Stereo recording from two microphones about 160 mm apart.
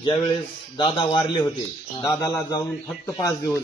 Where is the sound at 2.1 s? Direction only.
20° left (ahead or behind).